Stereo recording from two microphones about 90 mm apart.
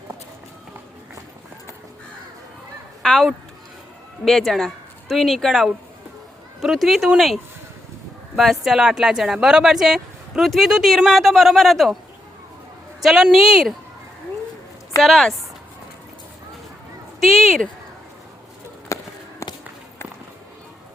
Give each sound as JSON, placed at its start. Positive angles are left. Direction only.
{"t": 3.0, "sound": "speech", "side_deg": 5}
{"t": 4.3, "sound": "speech", "side_deg": 0}
{"t": 8.4, "sound": "speech", "side_deg": 0}
{"t": 13.0, "sound": "speech", "side_deg": -5}
{"t": 14.9, "sound": "speech", "side_deg": 0}
{"t": 17.2, "sound": "speech", "side_deg": 0}
{"t": 18.9, "sound": "a sound", "side_deg": 35}
{"t": 19.4, "sound": "walk", "side_deg": 30}